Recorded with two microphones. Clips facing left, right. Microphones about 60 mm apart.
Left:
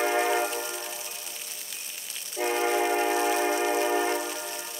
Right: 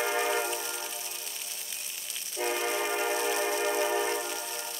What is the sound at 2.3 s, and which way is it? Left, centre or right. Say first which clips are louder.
Train: left 5 dB; centre.